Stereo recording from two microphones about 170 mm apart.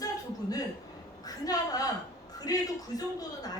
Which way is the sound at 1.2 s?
20° left (ahead or behind).